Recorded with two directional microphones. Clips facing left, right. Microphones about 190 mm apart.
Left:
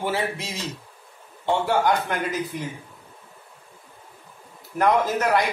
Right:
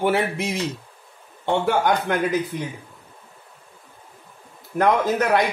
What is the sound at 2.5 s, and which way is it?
Speech, 20° right (ahead or behind).